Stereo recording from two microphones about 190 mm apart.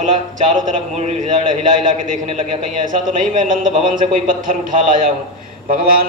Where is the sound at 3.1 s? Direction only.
45° right (ahead or behind).